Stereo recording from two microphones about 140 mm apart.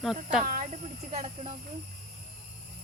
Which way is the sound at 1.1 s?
40° right (ahead or behind).